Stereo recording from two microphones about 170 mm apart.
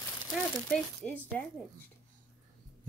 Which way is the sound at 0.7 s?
10° left (ahead or behind).